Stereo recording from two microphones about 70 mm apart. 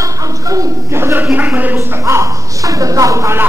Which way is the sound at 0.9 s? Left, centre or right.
Right.